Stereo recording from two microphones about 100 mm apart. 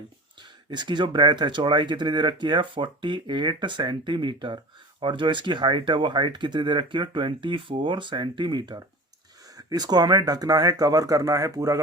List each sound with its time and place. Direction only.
0.7 s speech: 50° right (ahead or behind); by 11.8 s 35° right (ahead or behind)